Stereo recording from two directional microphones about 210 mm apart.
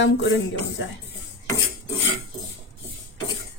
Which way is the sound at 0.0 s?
60° left (ahead or behind).